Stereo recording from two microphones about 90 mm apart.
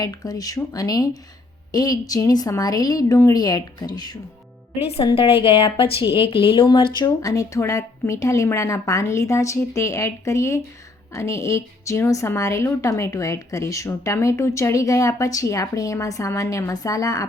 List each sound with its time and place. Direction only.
0.0 s a woman's voice: 45° left (ahead or behind)
5.1 s speech: 80° left
6.7 s speech: 60° left (ahead or behind)
7.2 s a woman's voice: 40° left (ahead or behind)